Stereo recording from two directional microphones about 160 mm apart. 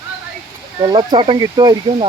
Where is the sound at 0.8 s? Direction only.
25° right (ahead or behind).